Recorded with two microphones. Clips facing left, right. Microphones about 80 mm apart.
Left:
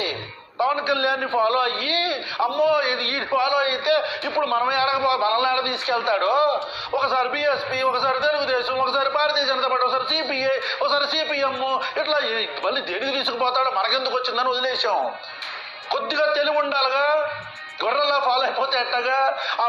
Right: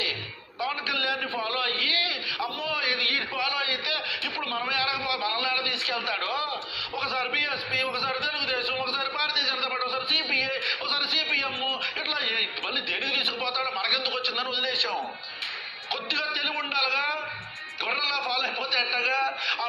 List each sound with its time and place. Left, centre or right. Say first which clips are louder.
0.6 s a man's voice: left 9 dB; left
11.6 s a man's voice: left 9 dB; left
11.9 s a man's voice: left 9 dB; left
15.9 s a man's voice: left 11 dB; left